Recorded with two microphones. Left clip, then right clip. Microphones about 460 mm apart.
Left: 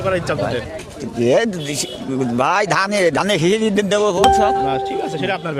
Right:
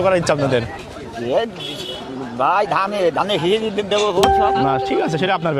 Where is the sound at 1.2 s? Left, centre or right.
Left.